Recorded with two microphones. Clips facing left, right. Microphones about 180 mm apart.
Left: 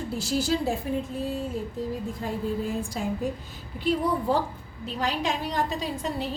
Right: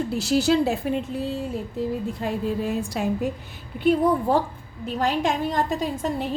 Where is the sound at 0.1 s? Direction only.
70° right (ahead or behind).